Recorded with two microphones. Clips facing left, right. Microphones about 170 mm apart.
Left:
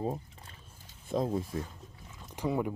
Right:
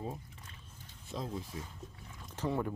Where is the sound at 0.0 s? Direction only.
40° left (ahead or behind).